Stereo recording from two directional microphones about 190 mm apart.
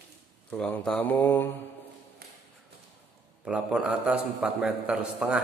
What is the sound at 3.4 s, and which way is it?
A man's voice, 5° right (ahead or behind).